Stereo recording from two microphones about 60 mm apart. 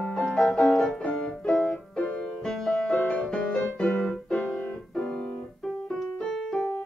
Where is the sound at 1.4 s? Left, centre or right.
Centre.